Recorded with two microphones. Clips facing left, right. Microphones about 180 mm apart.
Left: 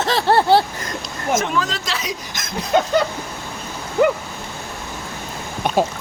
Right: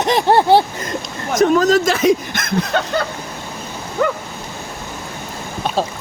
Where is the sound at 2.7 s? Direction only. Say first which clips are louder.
Left 6 dB; 15° left (ahead or behind).